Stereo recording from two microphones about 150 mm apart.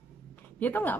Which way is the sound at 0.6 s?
10° left (ahead or behind).